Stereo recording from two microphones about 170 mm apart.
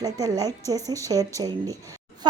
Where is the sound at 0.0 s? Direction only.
20° right (ahead or behind).